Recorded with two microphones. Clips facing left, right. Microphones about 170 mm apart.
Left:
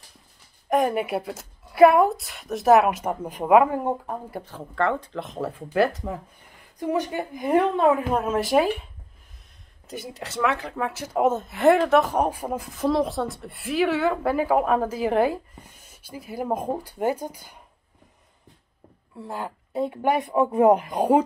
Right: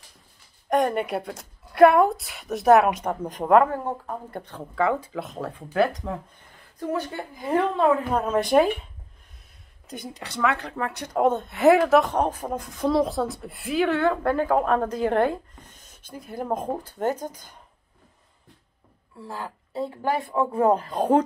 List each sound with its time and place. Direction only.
0.7 s a woman's voice: 5° left (ahead or behind)
4.4 s a woman's voice: centre (ahead or behind)
6.8 s speech: 15° left (ahead or behind)
8.1 s a woman's voice: 5° left (ahead or behind)
9.8 s a woman's voice: centre (ahead or behind)
12.1 s speech: 10° left (ahead or behind)
19.1 s a woman's voice: 20° left (ahead or behind)